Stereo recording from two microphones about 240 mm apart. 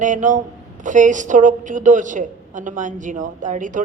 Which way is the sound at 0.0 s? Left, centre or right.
Right.